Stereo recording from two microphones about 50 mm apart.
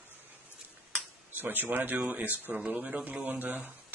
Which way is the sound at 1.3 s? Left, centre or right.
Right.